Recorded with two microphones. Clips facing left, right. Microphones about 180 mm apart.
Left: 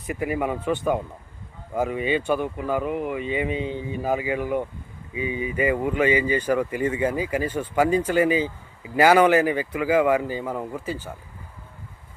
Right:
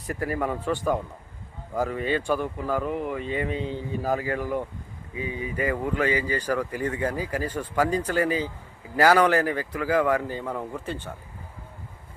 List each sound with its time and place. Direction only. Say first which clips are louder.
0.1 s speech: left 2 dB; 10° left (ahead or behind)
1.8 s speech: left 2 dB; 15° left (ahead or behind)
7.3 s speech: left 4 dB; 25° left (ahead or behind)
7.8 s speech: left 4 dB; 5° left (ahead or behind)